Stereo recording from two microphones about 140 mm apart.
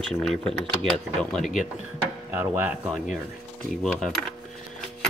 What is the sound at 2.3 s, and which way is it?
Speech, 15° right (ahead or behind).